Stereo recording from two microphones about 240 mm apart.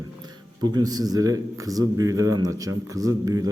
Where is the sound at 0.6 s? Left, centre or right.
Centre.